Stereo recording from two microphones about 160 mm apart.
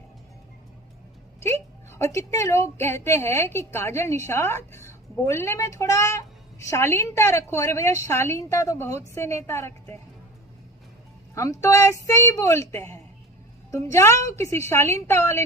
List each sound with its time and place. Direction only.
1.4 s a woman's voice: 15° left (ahead or behind)
11.6 s a woman's voice: 20° left (ahead or behind)